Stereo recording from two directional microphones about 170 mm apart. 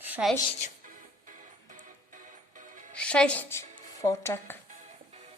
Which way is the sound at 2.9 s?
5° left (ahead or behind).